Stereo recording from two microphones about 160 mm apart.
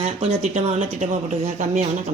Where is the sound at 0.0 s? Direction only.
40° right (ahead or behind).